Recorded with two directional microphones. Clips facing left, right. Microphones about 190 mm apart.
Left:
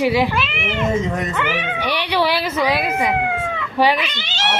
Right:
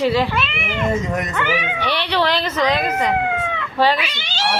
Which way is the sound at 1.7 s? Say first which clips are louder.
Left 3 dB; 10° left (ahead or behind).